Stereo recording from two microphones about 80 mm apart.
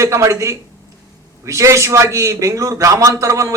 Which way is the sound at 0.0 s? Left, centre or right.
Right.